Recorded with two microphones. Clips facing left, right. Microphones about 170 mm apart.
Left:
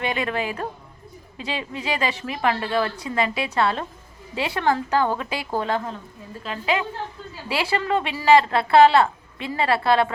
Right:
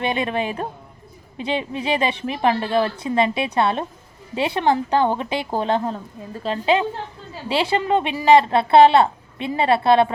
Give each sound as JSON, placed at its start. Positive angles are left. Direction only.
{"t": 0.0, "sound": "a woman's voice", "side_deg": -20}